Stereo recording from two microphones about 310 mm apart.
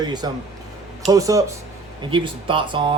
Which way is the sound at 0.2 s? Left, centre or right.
Centre.